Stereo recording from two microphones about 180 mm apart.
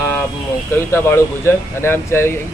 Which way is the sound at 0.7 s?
10° left (ahead or behind).